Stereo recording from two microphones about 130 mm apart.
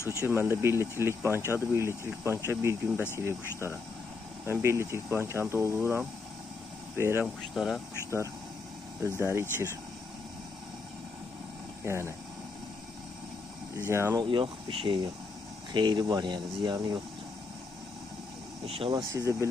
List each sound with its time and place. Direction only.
0.1 s speech: 20° right (ahead or behind)
7.5 s speech: centre (ahead or behind)
9.1 s speech: 20° right (ahead or behind)
11.9 s speech: 20° right (ahead or behind)
13.7 s speech: 20° right (ahead or behind)
14.2 s speech: 40° right (ahead or behind)
18.6 s speech: 45° right (ahead or behind)
19.2 s speech: 25° right (ahead or behind)